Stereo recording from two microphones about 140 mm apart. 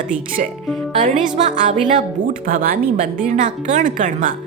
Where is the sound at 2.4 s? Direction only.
90° right.